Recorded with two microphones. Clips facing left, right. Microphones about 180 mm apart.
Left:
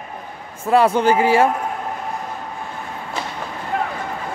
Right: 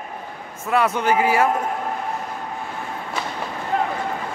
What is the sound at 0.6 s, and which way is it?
Speech, 30° left (ahead or behind).